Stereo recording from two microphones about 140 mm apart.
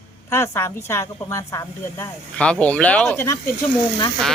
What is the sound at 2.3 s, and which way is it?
Speech, 10° left (ahead or behind).